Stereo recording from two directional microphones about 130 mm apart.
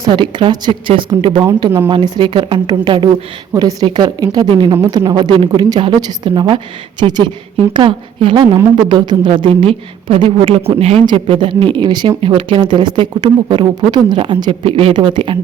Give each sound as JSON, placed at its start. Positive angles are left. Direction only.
{"t": 0.1, "sound": "a woman's voice", "side_deg": -35}
{"t": 11.0, "sound": "speech", "side_deg": -35}